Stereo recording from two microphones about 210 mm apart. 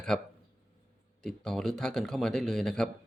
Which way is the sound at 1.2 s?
5° left (ahead or behind).